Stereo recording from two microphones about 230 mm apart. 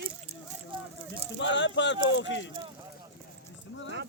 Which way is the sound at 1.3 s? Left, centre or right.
Left.